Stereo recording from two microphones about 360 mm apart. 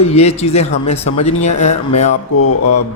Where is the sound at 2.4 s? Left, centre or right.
Left.